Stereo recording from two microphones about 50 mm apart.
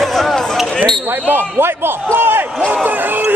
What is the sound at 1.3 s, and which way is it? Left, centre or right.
Speech, right.